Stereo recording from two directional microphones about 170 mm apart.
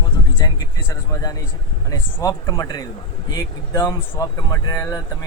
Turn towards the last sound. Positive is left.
turn(degrees=20)  # may be behind; listen again after turning